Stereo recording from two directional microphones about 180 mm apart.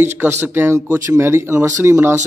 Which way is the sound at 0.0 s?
10° right (ahead or behind).